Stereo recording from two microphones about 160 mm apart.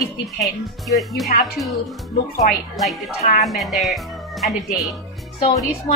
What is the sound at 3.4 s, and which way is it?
Speech, centre (ahead or behind).